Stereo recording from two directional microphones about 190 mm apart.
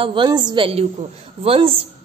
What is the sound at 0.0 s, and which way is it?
A woman's voice, 25° right (ahead or behind).